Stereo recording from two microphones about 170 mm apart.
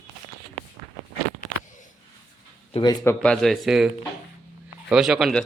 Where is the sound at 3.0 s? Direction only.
5° left (ahead or behind).